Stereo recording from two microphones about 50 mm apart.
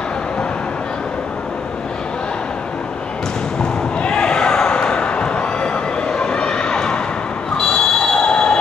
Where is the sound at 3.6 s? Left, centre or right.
Centre.